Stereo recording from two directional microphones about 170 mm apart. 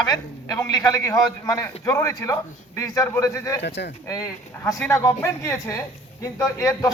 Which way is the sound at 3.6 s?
90° left.